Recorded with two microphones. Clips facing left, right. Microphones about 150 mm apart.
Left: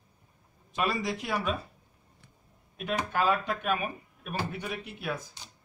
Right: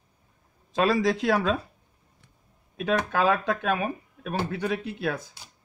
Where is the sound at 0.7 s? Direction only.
90° right.